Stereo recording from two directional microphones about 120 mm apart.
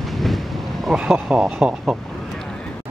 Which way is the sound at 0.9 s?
10° right (ahead or behind).